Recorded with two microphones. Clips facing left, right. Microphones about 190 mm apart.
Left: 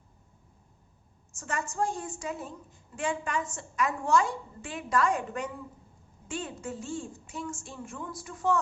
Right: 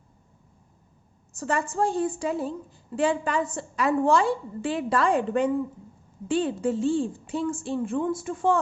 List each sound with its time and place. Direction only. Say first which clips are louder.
1.4 s a woman's voice: right 6 dB; 35° right (ahead or behind)